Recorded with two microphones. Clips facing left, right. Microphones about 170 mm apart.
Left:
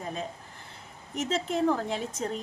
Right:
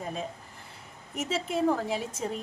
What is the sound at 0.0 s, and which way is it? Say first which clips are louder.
A woman's voice: even; centre (ahead or behind).